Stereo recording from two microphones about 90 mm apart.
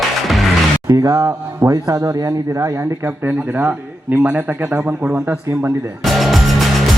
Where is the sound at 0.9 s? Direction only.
35° right (ahead or behind).